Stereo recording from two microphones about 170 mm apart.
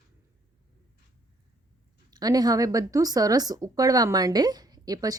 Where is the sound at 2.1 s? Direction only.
25° right (ahead or behind).